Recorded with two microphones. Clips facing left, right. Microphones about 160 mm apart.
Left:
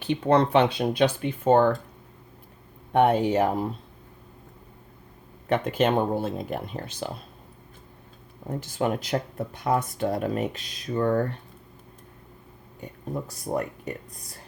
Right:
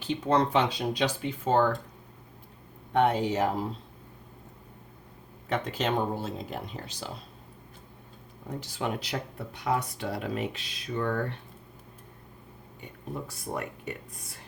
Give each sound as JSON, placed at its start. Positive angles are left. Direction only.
{"t": 0.0, "sound": "speech", "side_deg": 60}
{"t": 2.9, "sound": "speech", "side_deg": 55}
{"t": 5.5, "sound": "speech", "side_deg": 55}
{"t": 8.4, "sound": "speech", "side_deg": 50}
{"t": 12.8, "sound": "speech", "side_deg": 40}